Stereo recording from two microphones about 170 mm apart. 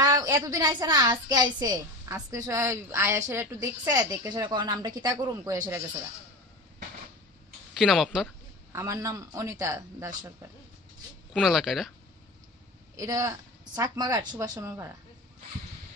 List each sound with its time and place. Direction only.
0.0 s a woman's voice: 20° right (ahead or behind)
7.7 s speech: centre (ahead or behind)
8.7 s a woman's voice: 20° right (ahead or behind)
11.3 s speech: centre (ahead or behind)
12.9 s a woman's voice: 20° right (ahead or behind)